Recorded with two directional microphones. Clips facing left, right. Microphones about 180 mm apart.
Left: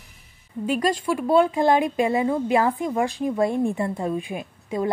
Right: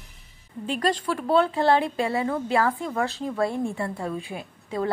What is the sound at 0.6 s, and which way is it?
A woman's voice, 10° left (ahead or behind).